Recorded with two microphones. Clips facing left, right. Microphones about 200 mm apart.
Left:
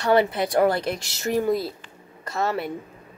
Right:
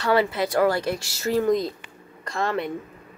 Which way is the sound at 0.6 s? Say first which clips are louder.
Left 1 dB; 20° left (ahead or behind).